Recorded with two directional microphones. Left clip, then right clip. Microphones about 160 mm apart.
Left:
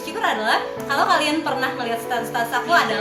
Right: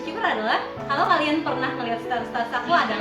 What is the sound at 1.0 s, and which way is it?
A woman's voice, 25° left (ahead or behind).